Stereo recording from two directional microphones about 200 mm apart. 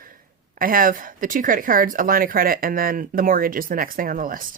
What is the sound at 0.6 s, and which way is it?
Speech, 45° right (ahead or behind).